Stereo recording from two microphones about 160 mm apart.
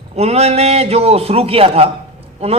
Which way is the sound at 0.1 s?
40° right (ahead or behind).